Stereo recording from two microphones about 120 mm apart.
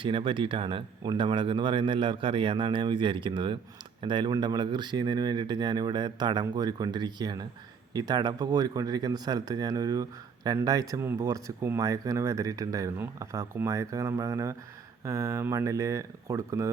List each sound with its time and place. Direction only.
0.0 s speech: 45° right (ahead or behind); by 16.7 s 25° right (ahead or behind)